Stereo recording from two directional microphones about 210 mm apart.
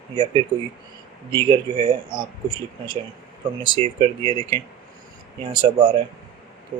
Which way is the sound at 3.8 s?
25° right (ahead or behind).